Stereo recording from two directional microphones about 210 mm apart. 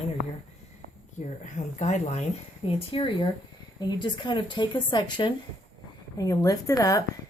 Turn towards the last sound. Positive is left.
turn(degrees=15)  # may be behind; listen again after turning